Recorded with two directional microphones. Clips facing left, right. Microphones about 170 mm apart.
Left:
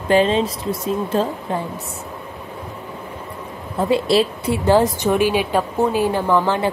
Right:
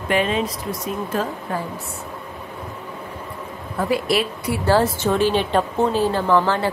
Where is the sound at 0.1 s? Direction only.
30° left (ahead or behind).